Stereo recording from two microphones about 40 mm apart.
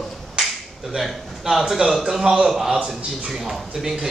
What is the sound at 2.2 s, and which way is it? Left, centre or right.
Speech, centre.